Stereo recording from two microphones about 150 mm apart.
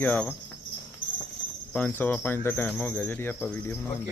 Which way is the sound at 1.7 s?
10° left (ahead or behind).